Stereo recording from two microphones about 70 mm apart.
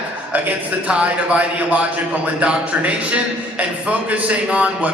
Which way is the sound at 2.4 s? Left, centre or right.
Centre.